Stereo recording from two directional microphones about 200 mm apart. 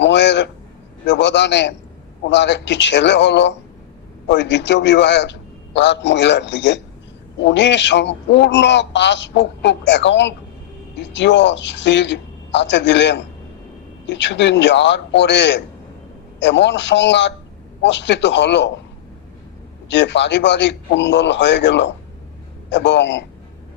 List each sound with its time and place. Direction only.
0.0 s a sound: 60° left (ahead or behind)
1.0 s a man's voice: 60° left (ahead or behind)
19.9 s a man's voice: 60° left (ahead or behind)